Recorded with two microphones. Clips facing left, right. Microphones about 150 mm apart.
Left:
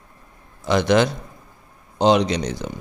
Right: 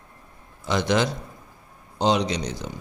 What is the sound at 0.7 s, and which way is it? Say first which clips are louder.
Speech: left 5 dB; 60° left (ahead or behind).